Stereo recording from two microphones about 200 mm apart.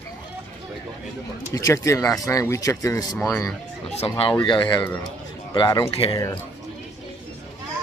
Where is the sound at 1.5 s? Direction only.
15° left (ahead or behind).